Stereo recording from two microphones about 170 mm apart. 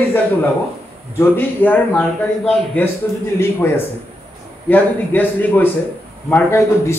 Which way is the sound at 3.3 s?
15° left (ahead or behind).